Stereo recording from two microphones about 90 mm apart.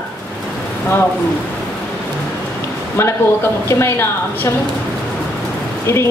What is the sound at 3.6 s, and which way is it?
Speech, 25° left (ahead or behind).